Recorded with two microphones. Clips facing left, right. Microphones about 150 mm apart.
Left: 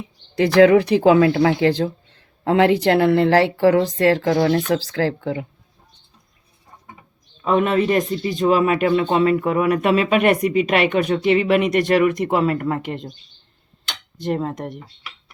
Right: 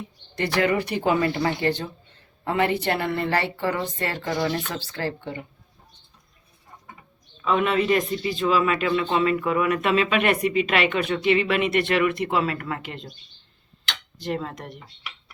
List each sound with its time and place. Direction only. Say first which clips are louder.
0.3 s speech: left 10 dB; 90° left
4.4 s speech: left 8 dB; 65° left (ahead or behind); by 5.5 s 90° left
7.4 s speech: left 4 dB; 45° left (ahead or behind)
14.2 s speech: left 6 dB; 45° left (ahead or behind)